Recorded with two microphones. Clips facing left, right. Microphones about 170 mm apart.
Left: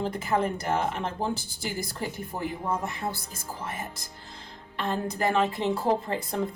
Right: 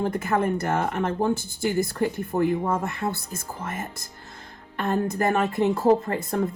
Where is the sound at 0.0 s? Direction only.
55° right (ahead or behind).